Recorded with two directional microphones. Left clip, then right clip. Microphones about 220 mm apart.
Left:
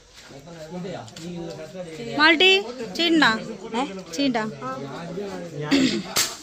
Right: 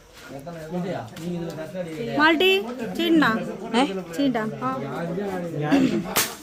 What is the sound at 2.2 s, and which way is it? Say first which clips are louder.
A woman's voice: left 2 dB; 15° left (ahead or behind).